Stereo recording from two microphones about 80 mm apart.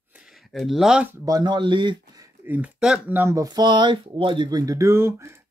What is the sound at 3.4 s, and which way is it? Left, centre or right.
Speech, right.